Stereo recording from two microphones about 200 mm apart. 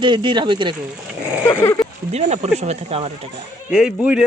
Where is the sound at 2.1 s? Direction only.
35° right (ahead or behind).